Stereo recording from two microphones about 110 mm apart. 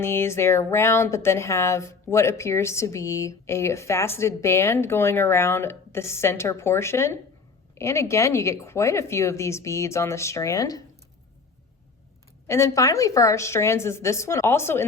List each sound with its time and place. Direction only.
0.0 s speech: 20° left (ahead or behind)
12.5 s speech: 25° left (ahead or behind)